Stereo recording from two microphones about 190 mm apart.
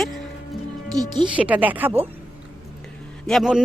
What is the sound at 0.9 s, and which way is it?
Speech, 20° right (ahead or behind).